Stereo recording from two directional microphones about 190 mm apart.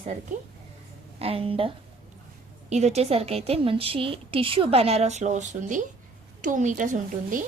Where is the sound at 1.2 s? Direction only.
30° right (ahead or behind).